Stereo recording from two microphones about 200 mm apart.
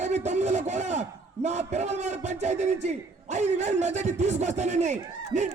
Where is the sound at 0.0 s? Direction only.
35° right (ahead or behind).